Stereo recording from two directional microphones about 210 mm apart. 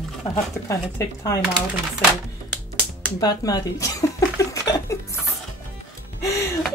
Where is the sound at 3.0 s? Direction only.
15° left (ahead or behind).